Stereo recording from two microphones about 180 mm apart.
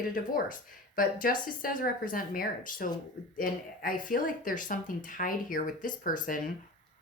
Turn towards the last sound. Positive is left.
turn(degrees=50)  # may be behind; listen again after turning